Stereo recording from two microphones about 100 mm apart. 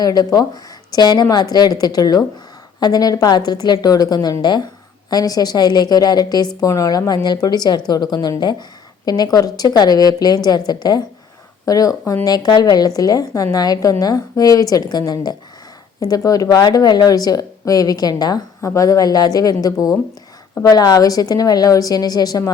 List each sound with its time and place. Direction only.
0.0 s a woman's voice: 40° left (ahead or behind)